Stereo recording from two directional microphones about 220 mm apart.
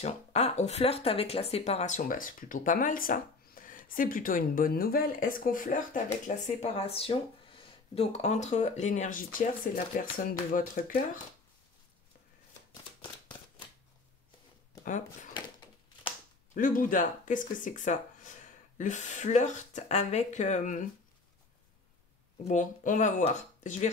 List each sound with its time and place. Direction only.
0.0 s speech: 30° left (ahead or behind)
16.5 s speech: 40° left (ahead or behind)
22.4 s speech: 35° left (ahead or behind)